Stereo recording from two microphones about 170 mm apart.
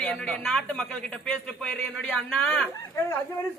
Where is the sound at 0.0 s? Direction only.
5° left (ahead or behind).